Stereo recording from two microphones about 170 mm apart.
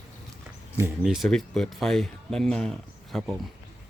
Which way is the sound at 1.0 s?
Centre (ahead or behind).